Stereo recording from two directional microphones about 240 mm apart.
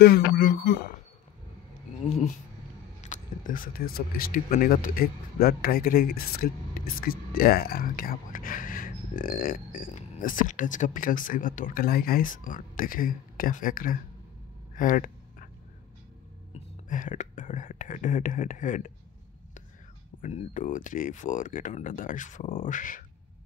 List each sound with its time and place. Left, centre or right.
0.0 s speech: left
2.0 s speech: left
14.8 s a sound: left
16.9 s speech: left
20.2 s speech: left